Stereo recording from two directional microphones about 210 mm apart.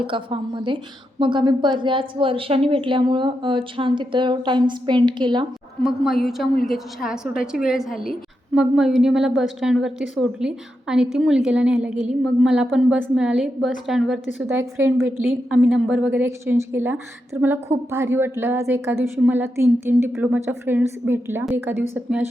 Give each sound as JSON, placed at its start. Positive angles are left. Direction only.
{"t": 0.1, "sound": "a woman's voice", "side_deg": -25}
{"t": 5.8, "sound": "a woman's voice", "side_deg": 0}
{"t": 14.4, "sound": "a woman's voice", "side_deg": -15}